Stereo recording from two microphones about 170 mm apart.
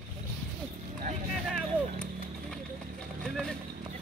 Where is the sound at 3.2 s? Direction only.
5° left (ahead or behind).